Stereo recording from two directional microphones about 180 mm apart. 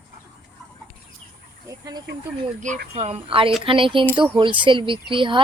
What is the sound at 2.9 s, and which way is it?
A woman's voice, 35° right (ahead or behind).